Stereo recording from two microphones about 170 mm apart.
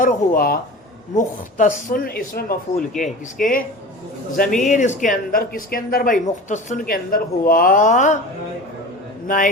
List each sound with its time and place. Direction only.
0.0 s speech: 60° left (ahead or behind)
4.6 s speech: 45° left (ahead or behind)
9.2 s a man's voice: 55° left (ahead or behind)